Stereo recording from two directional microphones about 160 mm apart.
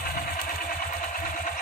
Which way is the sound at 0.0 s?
60° left (ahead or behind).